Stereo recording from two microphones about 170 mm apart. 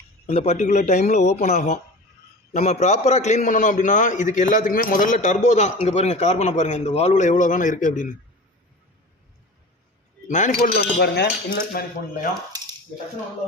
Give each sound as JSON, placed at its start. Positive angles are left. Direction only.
{"t": 0.3, "sound": "a man's voice", "side_deg": 40}
{"t": 10.2, "sound": "a man's voice", "side_deg": 45}
{"t": 10.8, "sound": "speech", "side_deg": 75}
{"t": 12.5, "sound": "a sound", "side_deg": -20}